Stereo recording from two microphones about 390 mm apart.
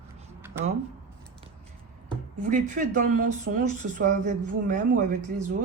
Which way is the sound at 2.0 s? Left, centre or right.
Centre.